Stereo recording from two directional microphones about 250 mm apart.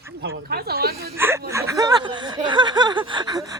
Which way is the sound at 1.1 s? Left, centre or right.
Centre.